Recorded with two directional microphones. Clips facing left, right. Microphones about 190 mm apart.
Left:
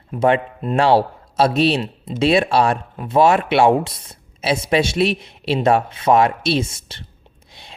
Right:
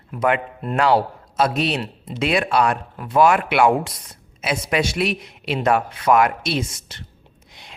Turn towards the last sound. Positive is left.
turn(degrees=30)  # may be behind; listen again after turning